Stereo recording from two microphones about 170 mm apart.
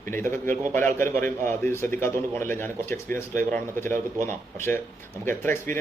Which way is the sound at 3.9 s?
50° right (ahead or behind).